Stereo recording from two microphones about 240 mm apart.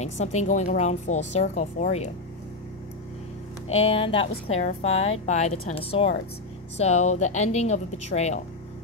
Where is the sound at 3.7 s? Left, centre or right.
Left.